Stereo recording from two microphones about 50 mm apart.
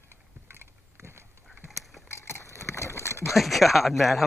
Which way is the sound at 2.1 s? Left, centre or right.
Left.